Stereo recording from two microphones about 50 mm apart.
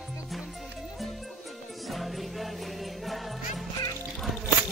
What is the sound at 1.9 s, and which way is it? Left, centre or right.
Music, centre.